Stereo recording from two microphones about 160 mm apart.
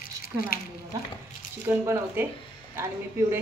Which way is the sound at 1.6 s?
15° right (ahead or behind).